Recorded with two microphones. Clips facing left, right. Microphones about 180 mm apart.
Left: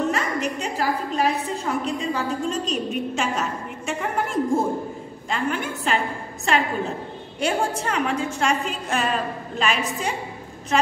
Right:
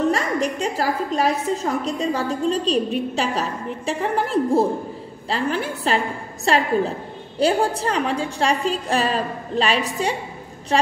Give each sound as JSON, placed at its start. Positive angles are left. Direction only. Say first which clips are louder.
{"t": 0.1, "sound": "a woman's voice", "louder": "right 3 dB", "side_deg": -40}